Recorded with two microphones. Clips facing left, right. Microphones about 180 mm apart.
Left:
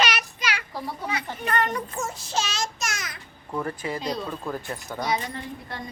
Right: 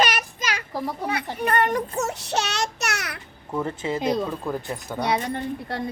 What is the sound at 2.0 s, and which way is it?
Child singing, 70° right (ahead or behind).